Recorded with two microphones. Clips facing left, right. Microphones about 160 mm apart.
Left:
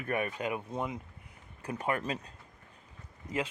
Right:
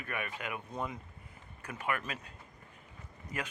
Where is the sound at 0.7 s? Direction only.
20° left (ahead or behind).